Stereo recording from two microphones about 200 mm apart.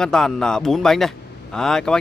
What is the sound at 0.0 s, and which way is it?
A man's voice, 5° left (ahead or behind).